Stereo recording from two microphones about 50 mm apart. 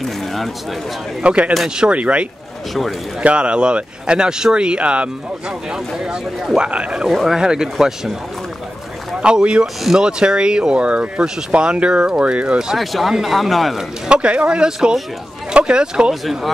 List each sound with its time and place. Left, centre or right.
0.0 s a sound: centre
1.2 s speech: right
5.7 s speech: centre
7.1 s speech: centre
7.3 s speech: centre
9.2 s speech: centre
12.7 s speech: centre
14.0 s speech: right